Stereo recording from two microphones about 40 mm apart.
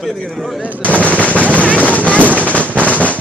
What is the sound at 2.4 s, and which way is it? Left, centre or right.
Drum, left.